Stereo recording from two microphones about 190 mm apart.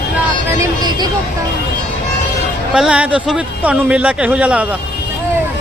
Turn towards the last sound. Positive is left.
turn(degrees=-5)  # may be behind; listen again after turning